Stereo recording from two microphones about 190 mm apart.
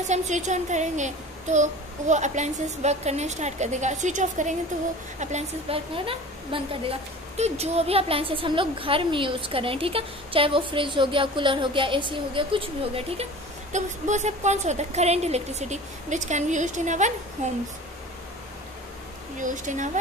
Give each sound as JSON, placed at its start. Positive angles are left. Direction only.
{"t": 0.0, "sound": "a woman's voice", "side_deg": -40}
{"t": 19.4, "sound": "a woman's voice", "side_deg": -40}